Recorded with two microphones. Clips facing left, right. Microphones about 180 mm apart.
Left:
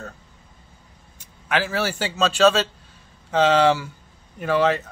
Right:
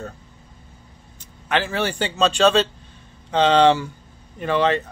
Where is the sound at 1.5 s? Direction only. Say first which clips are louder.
Right 1 dB; 5° left (ahead or behind).